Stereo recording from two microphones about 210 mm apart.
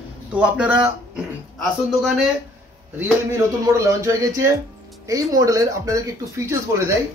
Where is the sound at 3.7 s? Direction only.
15° right (ahead or behind).